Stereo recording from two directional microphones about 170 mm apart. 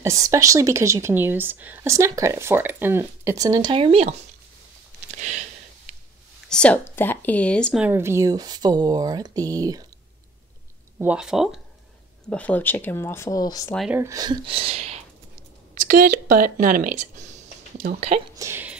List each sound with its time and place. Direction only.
0.0 s a woman's voice: 20° right (ahead or behind); by 4.1 s 35° right (ahead or behind)
5.1 s a sound: 45° right (ahead or behind)
6.5 s speech: 5° left (ahead or behind)
7.8 s speech: 15° right (ahead or behind)
11.0 s speech: 5° right (ahead or behind)
12.3 s speech: 10° left (ahead or behind)
13.9 s speech: 20° right (ahead or behind); by 15.0 s 40° right (ahead or behind)
15.7 s speech: 55° right (ahead or behind)
18.3 s a sound: 15° right (ahead or behind)